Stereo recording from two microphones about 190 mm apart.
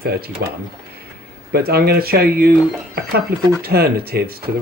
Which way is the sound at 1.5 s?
55° right (ahead or behind).